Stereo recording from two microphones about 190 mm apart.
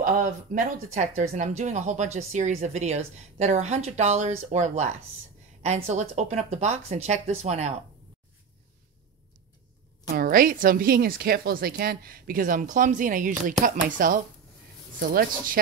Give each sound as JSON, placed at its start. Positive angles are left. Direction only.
{"t": 0.0, "sound": "a woman's voice", "side_deg": -40}
{"t": 10.0, "sound": "a woman's voice", "side_deg": -50}